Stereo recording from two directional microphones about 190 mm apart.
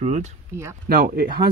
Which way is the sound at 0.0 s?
35° right (ahead or behind).